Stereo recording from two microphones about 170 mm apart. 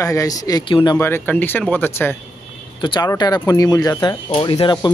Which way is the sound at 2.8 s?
25° left (ahead or behind).